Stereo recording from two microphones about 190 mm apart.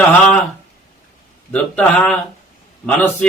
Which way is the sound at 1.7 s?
10° left (ahead or behind).